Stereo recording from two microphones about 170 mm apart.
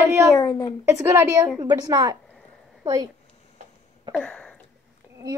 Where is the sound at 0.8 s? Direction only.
15° right (ahead or behind).